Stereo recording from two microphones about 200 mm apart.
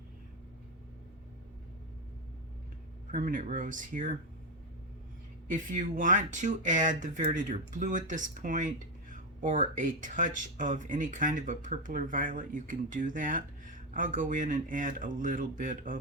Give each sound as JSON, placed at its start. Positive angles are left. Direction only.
{"t": 3.1, "sound": "speech", "side_deg": -40}
{"t": 5.5, "sound": "speech", "side_deg": -45}